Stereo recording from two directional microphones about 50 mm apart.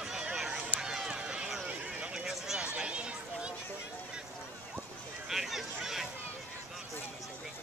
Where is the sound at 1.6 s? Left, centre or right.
Centre.